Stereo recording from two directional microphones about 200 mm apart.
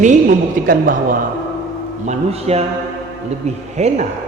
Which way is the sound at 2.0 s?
35° right (ahead or behind).